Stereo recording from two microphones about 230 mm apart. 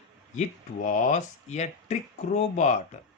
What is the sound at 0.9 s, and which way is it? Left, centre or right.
Speech, left.